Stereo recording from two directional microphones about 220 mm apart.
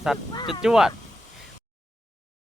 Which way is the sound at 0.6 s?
5° right (ahead or behind).